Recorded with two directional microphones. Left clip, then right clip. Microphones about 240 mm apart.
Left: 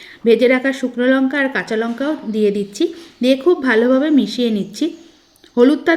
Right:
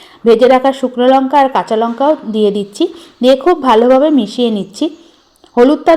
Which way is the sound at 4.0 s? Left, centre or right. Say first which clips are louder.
Right 5 dB; centre.